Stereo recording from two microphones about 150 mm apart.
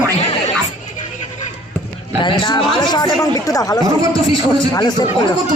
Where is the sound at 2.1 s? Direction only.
30° left (ahead or behind).